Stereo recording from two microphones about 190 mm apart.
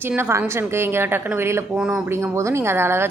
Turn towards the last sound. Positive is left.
turn(degrees=-10)  # may be behind; listen again after turning